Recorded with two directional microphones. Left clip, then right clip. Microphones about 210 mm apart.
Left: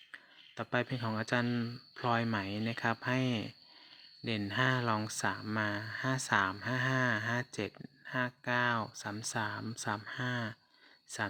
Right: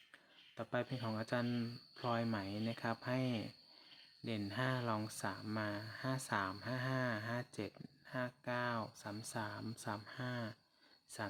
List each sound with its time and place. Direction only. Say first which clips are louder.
0.1 s speech: left 12 dB; 20° left (ahead or behind)